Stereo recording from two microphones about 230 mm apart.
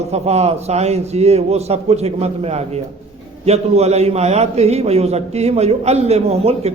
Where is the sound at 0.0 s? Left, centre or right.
Right.